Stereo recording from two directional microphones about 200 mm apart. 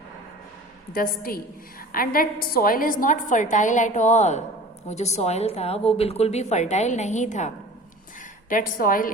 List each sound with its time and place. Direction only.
0.9 s a woman's voice: 45° left (ahead or behind)